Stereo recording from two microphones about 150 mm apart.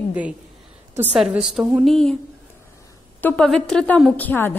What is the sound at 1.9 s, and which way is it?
Speech, 5° left (ahead or behind).